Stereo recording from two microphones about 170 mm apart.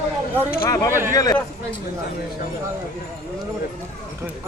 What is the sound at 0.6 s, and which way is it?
Speech, 20° left (ahead or behind).